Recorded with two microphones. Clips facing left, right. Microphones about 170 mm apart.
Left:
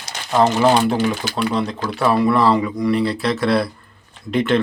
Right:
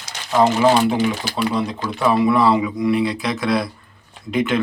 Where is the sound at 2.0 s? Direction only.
Centre (ahead or behind).